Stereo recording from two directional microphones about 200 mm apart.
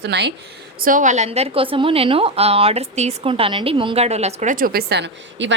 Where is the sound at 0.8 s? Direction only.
40° right (ahead or behind); by 5.6 s 65° right (ahead or behind).